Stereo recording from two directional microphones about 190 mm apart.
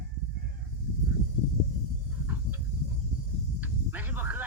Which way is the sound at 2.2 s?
10° right (ahead or behind).